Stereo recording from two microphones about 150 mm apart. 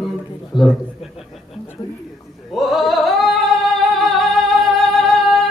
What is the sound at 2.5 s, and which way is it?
Singing, centre (ahead or behind).